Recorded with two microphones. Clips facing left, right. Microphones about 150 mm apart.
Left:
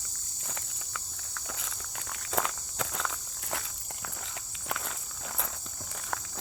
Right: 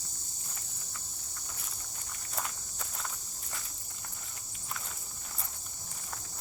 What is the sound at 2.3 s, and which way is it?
Walk, 90° left.